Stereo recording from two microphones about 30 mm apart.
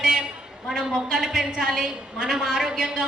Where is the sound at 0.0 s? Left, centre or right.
Right.